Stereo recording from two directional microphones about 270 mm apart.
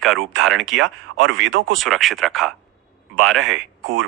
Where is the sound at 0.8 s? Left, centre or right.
Right.